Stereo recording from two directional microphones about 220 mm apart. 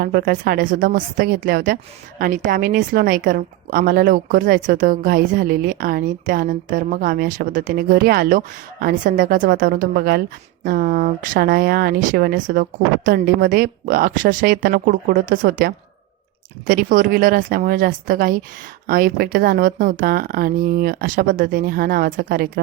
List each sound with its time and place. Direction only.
0.0 s a woman's voice: 40° right (ahead or behind)